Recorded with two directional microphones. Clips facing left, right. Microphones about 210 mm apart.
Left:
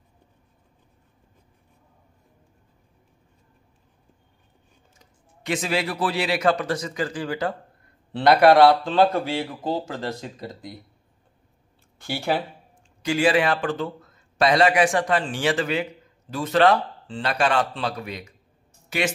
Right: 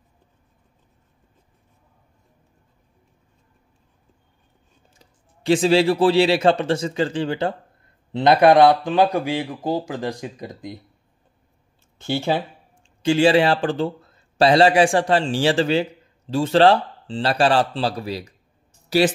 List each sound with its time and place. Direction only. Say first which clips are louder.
4.9 s speech: even; 30° right (ahead or behind)
12.1 s speech: right 3 dB; 20° right (ahead or behind)